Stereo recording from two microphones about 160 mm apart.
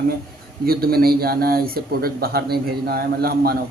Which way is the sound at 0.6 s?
70° right (ahead or behind).